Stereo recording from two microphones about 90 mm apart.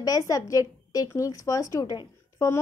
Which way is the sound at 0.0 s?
40° left (ahead or behind).